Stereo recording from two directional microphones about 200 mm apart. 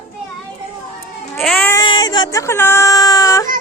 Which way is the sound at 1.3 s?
5° left (ahead or behind).